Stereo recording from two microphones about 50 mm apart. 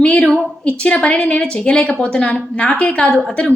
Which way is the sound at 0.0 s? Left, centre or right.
Left.